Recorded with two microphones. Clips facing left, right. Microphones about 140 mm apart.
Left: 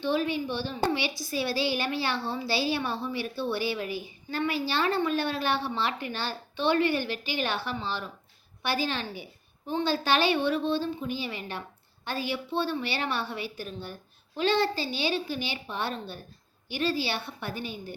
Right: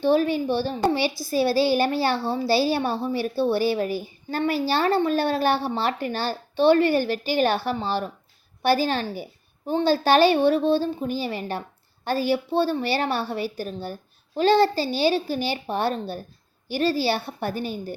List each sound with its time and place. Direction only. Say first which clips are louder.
0.0 s a woman's voice: right 7 dB; 40° right (ahead or behind)